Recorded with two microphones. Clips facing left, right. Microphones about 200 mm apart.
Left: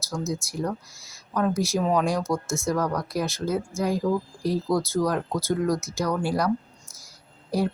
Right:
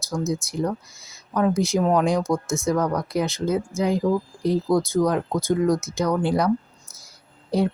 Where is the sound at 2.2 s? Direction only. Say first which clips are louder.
Right 3 dB; centre (ahead or behind).